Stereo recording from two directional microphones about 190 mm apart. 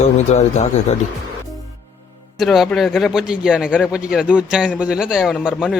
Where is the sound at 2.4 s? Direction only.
Centre (ahead or behind).